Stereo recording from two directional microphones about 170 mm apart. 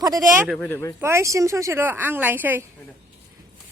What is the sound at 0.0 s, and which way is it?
Speech, 20° right (ahead or behind).